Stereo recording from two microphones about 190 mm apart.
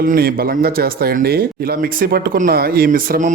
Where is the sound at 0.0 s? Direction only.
50° right (ahead or behind).